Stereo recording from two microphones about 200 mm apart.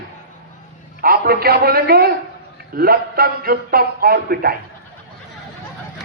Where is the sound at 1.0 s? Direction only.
45° right (ahead or behind).